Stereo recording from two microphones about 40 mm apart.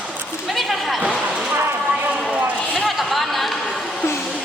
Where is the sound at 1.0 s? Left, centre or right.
Right.